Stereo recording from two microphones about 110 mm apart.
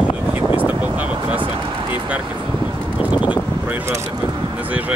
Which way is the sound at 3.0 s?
10° right (ahead or behind).